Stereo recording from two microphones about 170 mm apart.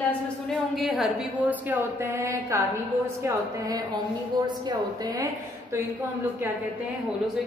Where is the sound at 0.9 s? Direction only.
5° right (ahead or behind).